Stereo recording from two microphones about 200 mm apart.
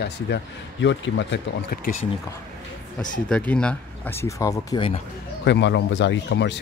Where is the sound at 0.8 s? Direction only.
65° left (ahead or behind).